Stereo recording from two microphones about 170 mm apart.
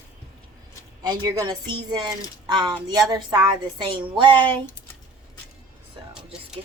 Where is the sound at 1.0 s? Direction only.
25° right (ahead or behind).